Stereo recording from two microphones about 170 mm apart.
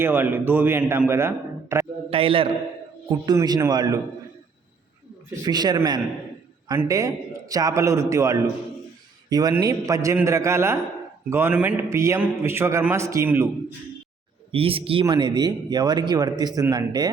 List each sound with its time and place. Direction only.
0.0 s a man's voice: 15° right (ahead or behind)
2.0 s a man's voice: 35° right (ahead or behind)
5.4 s a man's voice: 25° right (ahead or behind)
14.5 s a man's voice: 35° right (ahead or behind)